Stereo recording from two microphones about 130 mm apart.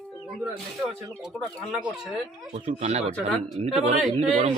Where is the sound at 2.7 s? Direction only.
55° right (ahead or behind).